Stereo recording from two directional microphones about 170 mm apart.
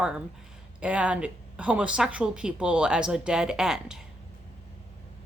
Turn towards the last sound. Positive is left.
turn(degrees=-5)  # may be behind; listen again after turning